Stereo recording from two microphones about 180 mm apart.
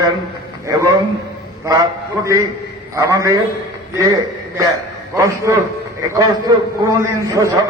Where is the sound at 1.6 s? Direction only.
20° right (ahead or behind).